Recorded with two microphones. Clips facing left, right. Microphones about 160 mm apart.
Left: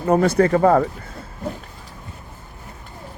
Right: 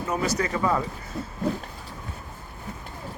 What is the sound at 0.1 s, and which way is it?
Speech, 55° left (ahead or behind).